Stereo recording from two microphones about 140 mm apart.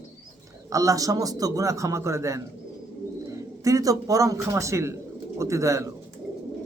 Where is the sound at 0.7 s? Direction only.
25° right (ahead or behind).